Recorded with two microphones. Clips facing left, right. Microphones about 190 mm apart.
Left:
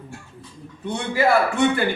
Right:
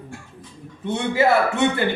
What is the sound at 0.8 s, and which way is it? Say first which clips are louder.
Speech: right 2 dB; 25° right (ahead or behind).